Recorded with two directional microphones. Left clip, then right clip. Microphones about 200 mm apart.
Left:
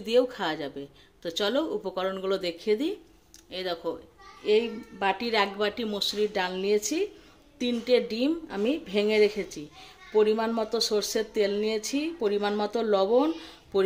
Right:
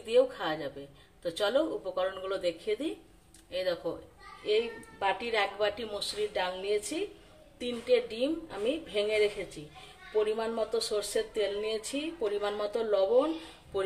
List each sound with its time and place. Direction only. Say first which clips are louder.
0.0 s speech: left 2 dB; 45° left (ahead or behind)
4.5 s speech: left 5 dB; 50° left (ahead or behind)